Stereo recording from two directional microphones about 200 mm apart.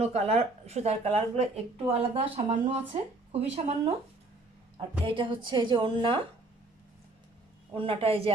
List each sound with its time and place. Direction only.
0.0 s a woman's voice: 30° right (ahead or behind)
7.7 s a woman's voice: 25° right (ahead or behind)